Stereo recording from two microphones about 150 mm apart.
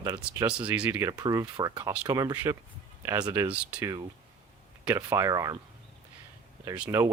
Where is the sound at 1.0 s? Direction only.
25° right (ahead or behind).